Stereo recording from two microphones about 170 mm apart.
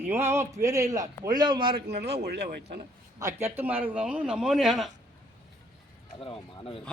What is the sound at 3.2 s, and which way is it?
A man's voice, 15° right (ahead or behind).